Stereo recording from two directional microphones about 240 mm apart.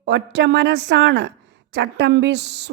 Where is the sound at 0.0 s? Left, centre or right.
Right.